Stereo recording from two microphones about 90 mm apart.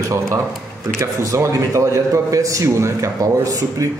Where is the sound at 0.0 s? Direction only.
35° right (ahead or behind).